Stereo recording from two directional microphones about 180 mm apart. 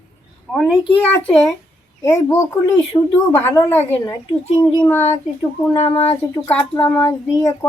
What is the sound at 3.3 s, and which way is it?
Speech, 15° left (ahead or behind).